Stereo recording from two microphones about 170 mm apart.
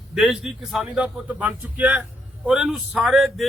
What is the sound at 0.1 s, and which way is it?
A man's voice, centre (ahead or behind).